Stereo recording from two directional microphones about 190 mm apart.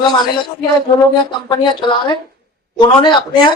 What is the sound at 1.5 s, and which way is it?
Speech, 25° left (ahead or behind).